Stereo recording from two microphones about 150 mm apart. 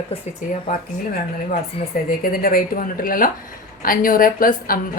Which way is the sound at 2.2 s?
75° left (ahead or behind).